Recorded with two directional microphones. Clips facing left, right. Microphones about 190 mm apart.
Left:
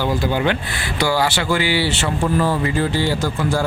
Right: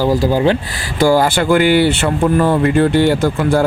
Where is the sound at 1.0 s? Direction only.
50° right (ahead or behind).